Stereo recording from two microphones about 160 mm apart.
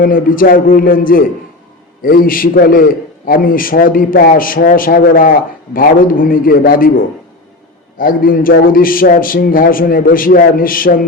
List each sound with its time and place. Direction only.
0.0 s a man's voice: 60° left (ahead or behind)